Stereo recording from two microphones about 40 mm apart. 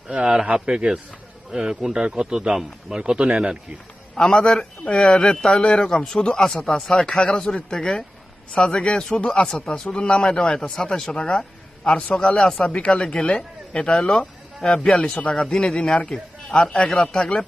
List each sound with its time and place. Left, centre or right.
0.1 s a man's voice: right
4.1 s a man's voice: centre